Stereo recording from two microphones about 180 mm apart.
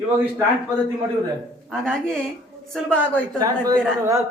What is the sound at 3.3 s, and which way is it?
Speech, 20° right (ahead or behind).